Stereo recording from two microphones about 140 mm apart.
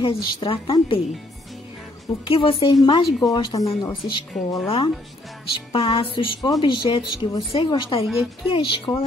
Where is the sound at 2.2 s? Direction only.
40° left (ahead or behind).